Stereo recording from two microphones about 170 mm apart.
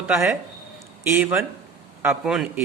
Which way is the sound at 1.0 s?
10° right (ahead or behind).